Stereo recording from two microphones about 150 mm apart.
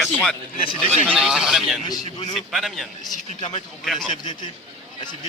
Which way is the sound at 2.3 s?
Centre (ahead or behind).